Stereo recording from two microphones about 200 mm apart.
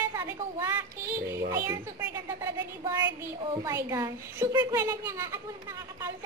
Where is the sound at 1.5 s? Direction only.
20° right (ahead or behind).